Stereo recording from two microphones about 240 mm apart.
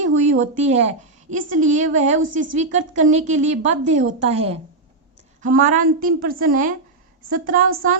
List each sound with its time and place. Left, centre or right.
0.0 s a woman's voice: right